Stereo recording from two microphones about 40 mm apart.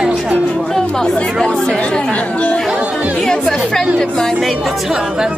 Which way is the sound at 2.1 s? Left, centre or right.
Left.